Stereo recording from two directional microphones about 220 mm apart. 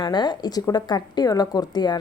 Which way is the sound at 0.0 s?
20° left (ahead or behind).